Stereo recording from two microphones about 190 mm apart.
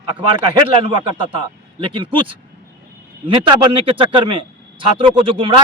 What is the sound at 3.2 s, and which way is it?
Speech, 25° right (ahead or behind).